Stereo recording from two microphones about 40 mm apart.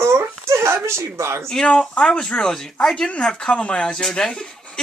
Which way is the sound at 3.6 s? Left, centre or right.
Left.